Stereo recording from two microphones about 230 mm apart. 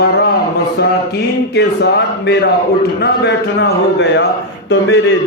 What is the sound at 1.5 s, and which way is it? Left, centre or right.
A man's voice, left.